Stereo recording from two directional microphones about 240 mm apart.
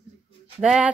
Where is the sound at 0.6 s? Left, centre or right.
Centre.